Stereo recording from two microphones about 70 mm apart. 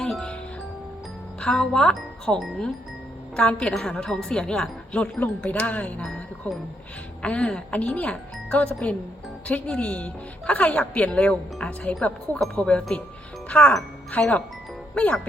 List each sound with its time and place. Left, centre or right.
0.0 s music: centre
1.4 s speech: centre
7.2 s speech: centre